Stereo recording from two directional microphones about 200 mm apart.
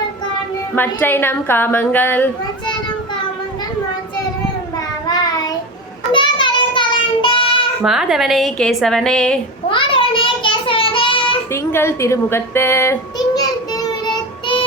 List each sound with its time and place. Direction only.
0.8 s a woman's voice: 10° left (ahead or behind)
5.0 s child singing: 20° left (ahead or behind)
7.9 s a woman's voice: 5° right (ahead or behind)
9.6 s child singing: 25° left (ahead or behind)
11.5 s child singing: 10° left (ahead or behind)